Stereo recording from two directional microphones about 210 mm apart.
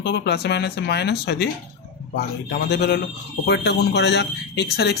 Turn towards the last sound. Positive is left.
turn(degrees=50)  # may be behind; listen again after turning